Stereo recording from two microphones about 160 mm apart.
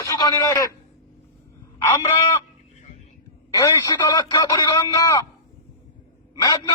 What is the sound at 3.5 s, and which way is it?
Speech, 20° left (ahead or behind).